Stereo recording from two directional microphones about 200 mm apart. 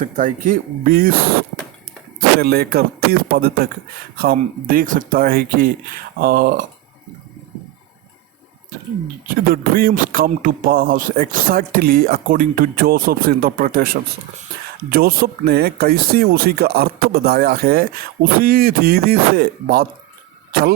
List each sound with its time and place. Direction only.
0.0 s speech: 40° right (ahead or behind)
2.4 s speech: 50° right (ahead or behind)
9.2 s speech: 45° right (ahead or behind)